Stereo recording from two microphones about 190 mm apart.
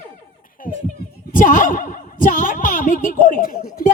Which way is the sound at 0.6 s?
45° left (ahead or behind).